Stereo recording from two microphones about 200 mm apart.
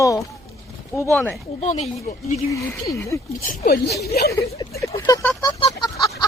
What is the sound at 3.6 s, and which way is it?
Speech, 50° left (ahead or behind).